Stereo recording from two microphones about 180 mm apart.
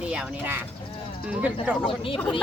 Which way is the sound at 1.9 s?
30° left (ahead or behind).